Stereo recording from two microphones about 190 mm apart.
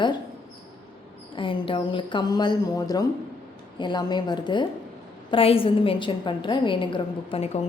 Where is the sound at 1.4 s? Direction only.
25° left (ahead or behind).